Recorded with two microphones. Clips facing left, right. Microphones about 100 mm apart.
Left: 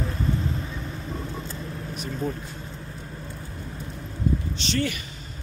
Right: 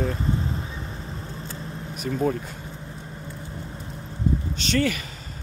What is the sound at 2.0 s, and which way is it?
Speech, 50° right (ahead or behind).